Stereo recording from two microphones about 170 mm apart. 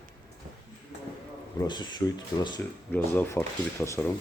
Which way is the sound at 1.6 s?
25° left (ahead or behind).